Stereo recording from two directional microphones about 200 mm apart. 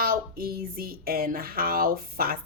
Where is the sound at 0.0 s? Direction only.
50° right (ahead or behind).